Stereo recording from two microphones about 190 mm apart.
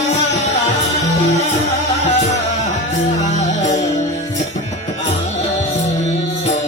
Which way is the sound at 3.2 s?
35° left (ahead or behind).